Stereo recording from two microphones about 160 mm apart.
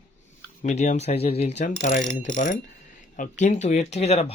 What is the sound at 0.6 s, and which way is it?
Mechanisms, 50° left (ahead or behind).